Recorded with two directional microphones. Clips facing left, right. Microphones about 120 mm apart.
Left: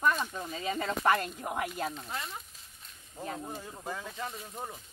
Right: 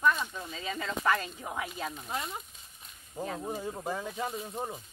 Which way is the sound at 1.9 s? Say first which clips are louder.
Right 3 dB; 5° right (ahead or behind).